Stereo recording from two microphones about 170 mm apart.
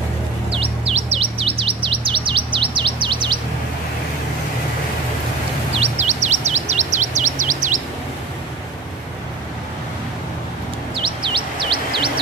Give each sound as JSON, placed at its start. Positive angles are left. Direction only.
{"t": 0.5, "sound": "bird", "side_deg": -35}
{"t": 5.7, "sound": "bird vocalization", "side_deg": -40}
{"t": 11.0, "sound": "bird", "side_deg": -30}